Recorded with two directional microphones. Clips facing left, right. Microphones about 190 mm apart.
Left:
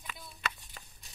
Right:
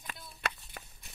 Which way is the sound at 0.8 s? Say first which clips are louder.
Right 4 dB; 60° right (ahead or behind).